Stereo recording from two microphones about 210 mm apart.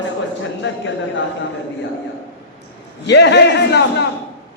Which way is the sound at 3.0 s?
55° left (ahead or behind).